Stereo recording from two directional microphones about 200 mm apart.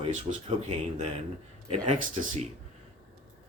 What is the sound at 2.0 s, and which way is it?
Speech, 40° right (ahead or behind).